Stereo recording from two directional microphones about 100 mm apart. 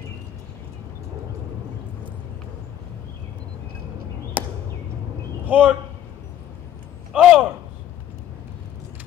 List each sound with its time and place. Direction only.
4.4 s chop: 15° right (ahead or behind)
5.4 s a man's voice: 15° right (ahead or behind)
7.1 s a man's voice: 10° right (ahead or behind)